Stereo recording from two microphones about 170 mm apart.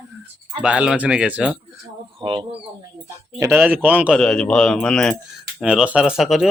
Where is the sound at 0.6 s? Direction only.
5° right (ahead or behind).